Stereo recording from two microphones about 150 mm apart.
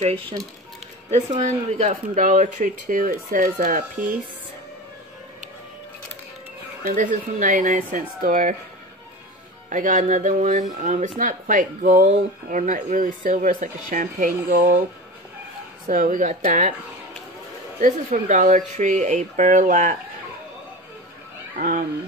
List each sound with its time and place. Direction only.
1.4 s speech: 50° right (ahead or behind)
6.8 s speech: 65° right (ahead or behind)
9.7 s speech: 60° right (ahead or behind)
15.9 s speech: 60° right (ahead or behind)
17.7 s speech: 60° right (ahead or behind)
21.5 s speech: 75° right (ahead or behind)